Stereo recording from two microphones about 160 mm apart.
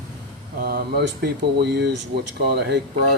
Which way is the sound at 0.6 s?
85° right.